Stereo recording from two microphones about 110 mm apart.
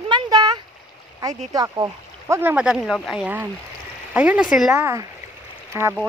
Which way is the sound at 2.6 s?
5° right (ahead or behind).